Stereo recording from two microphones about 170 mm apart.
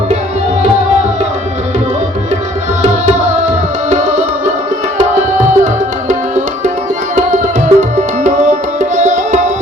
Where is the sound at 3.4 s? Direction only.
45° right (ahead or behind).